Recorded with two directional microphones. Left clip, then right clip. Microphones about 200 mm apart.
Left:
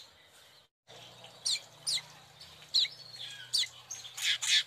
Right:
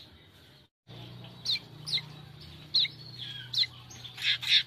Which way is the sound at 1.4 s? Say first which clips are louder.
Right 2 dB; 20° left (ahead or behind).